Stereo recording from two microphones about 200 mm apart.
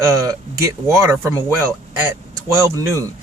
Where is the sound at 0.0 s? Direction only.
15° right (ahead or behind).